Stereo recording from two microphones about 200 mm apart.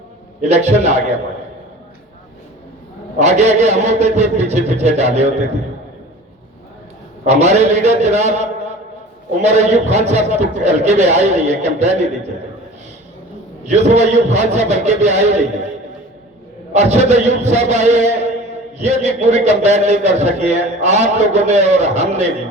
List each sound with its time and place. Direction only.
0.4 s a man's voice: 35° right (ahead or behind)
3.2 s a man's voice: 35° right (ahead or behind)
7.3 s a man's voice: 35° right (ahead or behind)
9.5 s a man's voice: 35° right (ahead or behind)
13.7 s a man's voice: 35° right (ahead or behind)
16.7 s a man's voice: 35° right (ahead or behind)